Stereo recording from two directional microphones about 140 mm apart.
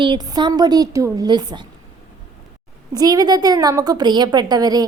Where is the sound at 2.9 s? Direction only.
25° right (ahead or behind).